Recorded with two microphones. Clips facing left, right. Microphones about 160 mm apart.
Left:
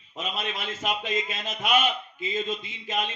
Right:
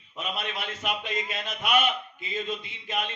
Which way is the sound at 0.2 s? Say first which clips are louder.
Left 1 dB; 60° right (ahead or behind).